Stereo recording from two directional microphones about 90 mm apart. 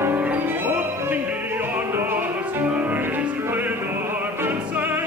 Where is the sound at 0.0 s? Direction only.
20° right (ahead or behind).